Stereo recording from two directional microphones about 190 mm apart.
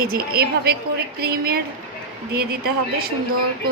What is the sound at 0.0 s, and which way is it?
A woman's voice, 50° right (ahead or behind).